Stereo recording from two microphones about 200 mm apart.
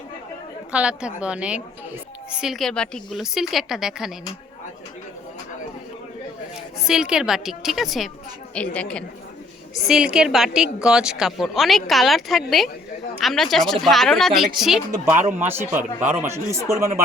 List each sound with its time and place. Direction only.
0.7 s a woman's voice: 5° right (ahead or behind)
6.8 s a woman's voice: 5° right (ahead or behind)